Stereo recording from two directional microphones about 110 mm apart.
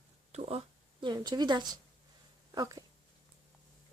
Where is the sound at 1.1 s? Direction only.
40° right (ahead or behind).